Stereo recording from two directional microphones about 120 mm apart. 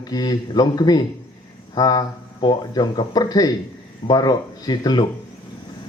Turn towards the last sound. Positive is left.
turn(degrees=35)  # may be behind; listen again after turning